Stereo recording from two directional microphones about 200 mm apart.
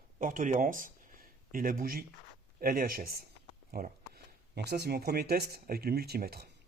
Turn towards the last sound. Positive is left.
turn(degrees=-50)  # may be behind; listen again after turning